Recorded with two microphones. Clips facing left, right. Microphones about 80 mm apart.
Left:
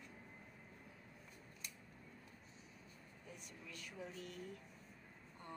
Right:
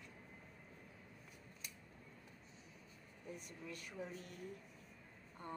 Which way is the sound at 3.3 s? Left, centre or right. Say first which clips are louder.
Right 3 dB; right.